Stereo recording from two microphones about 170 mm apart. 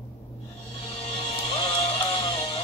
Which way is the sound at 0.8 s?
30° left (ahead or behind).